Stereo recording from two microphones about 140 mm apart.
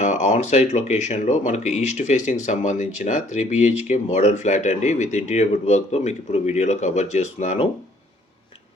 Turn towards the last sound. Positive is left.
turn(degrees=55)  # may be behind; listen again after turning